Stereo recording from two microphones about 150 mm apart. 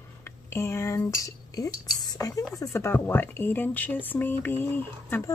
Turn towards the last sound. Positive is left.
turn(degrees=15)  # may be behind; listen again after turning